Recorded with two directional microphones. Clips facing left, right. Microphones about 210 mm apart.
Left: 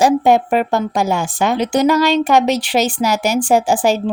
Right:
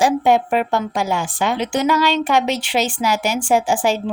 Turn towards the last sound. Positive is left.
turn(degrees=40)  # may be behind; listen again after turning